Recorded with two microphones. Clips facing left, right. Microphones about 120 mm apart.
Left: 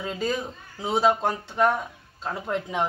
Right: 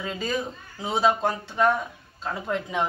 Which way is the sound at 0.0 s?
5° left (ahead or behind).